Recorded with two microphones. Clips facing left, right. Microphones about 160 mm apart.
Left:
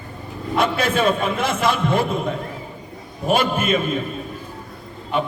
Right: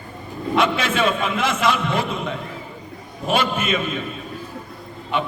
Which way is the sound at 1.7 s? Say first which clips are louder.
Left 2 dB; 50° left (ahead or behind).